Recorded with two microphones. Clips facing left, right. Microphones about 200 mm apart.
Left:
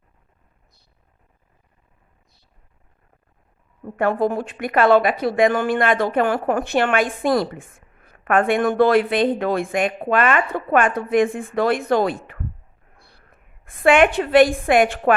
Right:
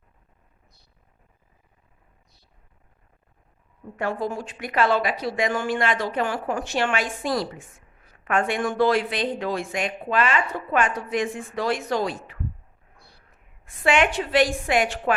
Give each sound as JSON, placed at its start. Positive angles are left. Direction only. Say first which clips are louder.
{"t": 3.8, "sound": "a woman's voice", "louder": "left 7 dB", "side_deg": 55}